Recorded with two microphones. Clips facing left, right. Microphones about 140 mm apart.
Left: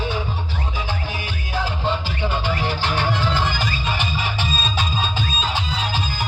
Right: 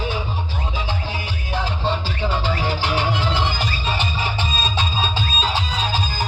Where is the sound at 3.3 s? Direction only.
30° right (ahead or behind).